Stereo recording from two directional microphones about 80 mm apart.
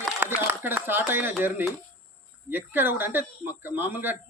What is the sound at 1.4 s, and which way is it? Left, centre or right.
Speech, right.